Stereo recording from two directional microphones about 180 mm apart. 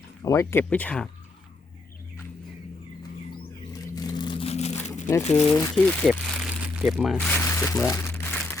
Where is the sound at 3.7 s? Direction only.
20° left (ahead or behind).